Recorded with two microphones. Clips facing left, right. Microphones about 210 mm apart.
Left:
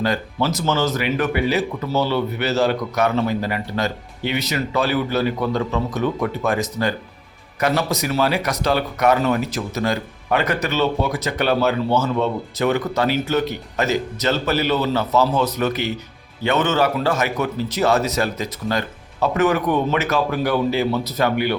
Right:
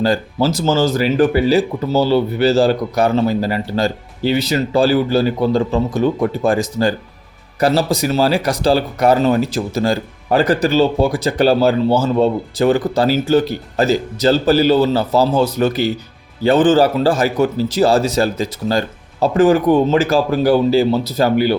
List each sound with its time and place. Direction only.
0.0 s speech: 30° right (ahead or behind)